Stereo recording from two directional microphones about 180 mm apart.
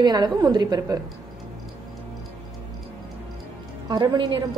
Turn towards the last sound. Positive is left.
turn(degrees=-25)  # may be behind; listen again after turning